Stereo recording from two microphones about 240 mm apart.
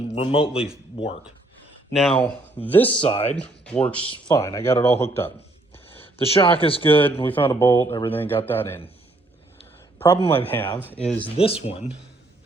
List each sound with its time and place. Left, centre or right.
0.1 s speech: left
0.5 s speech: centre
1.9 s speech: centre
2.9 s speech: left
3.3 s speech: centre
4.0 s speech: centre
5.7 s a sound: left
7.0 s speech: centre
10.0 s speech: centre
11.3 s speech: left